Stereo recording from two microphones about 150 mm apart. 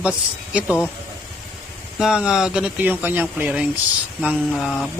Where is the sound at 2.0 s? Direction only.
5° right (ahead or behind).